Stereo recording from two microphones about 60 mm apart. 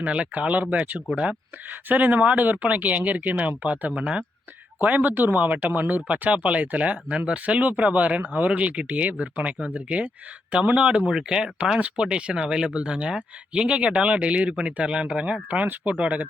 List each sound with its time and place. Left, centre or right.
0.0 s speech: right
4.8 s speech: right